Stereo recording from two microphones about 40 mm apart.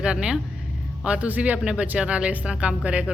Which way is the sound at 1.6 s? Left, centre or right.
Right.